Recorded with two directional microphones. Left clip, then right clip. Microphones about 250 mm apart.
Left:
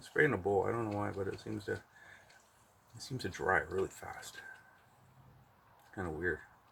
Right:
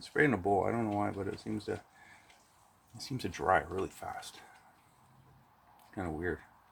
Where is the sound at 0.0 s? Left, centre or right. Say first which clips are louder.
Right 1 dB; right.